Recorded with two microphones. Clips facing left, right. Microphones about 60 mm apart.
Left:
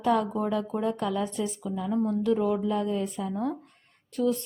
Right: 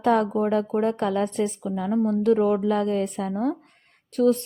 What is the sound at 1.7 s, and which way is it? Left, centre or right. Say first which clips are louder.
Speech: right 4 dB; right.